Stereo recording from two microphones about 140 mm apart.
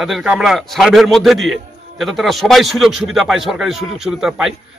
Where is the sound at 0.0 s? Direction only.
5° right (ahead or behind).